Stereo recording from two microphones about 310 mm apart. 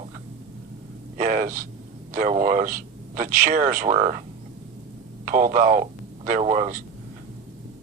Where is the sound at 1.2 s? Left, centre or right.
Right.